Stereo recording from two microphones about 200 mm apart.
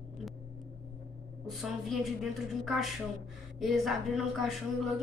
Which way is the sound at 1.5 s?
Centre (ahead or behind).